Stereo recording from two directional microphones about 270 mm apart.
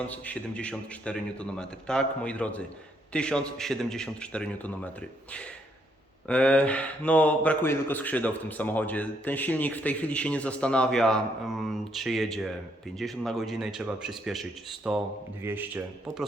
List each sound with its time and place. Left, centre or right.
0.1 s a man's voice: centre
6.2 s a man's voice: centre